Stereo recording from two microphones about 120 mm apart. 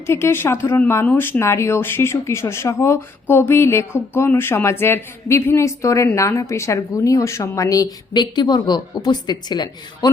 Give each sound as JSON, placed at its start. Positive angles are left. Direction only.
{"t": 0.1, "sound": "speech", "side_deg": 20}